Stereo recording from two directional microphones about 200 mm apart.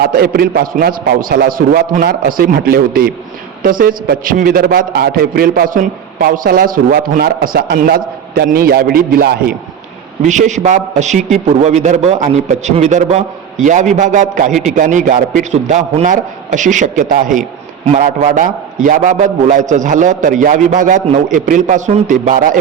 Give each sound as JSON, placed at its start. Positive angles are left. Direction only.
{"t": 0.0, "sound": "a man's voice", "side_deg": -50}
{"t": 10.2, "sound": "a man's voice", "side_deg": -35}